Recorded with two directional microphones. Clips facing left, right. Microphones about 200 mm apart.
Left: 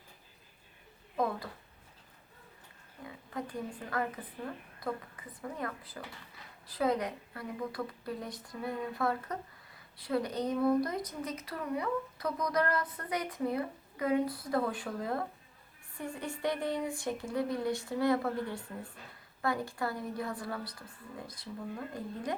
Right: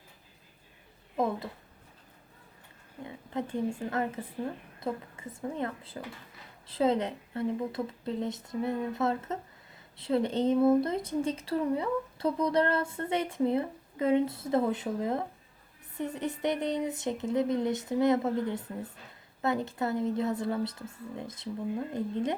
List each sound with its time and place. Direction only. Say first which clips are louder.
1.1 s speech: right 3 dB; 25° right (ahead or behind)
3.0 s a woman's voice: right 5 dB; 25° right (ahead or behind)